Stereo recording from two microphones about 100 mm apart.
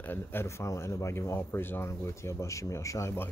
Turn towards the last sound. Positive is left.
turn(degrees=30)  # may be behind; listen again after turning